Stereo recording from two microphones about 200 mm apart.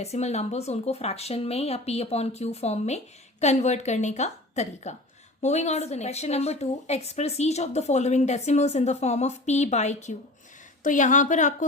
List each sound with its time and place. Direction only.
0.0 s a woman's voice: 35° left (ahead or behind)